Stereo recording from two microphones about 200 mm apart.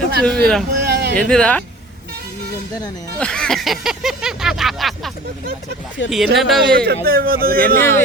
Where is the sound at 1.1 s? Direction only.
5° left (ahead or behind).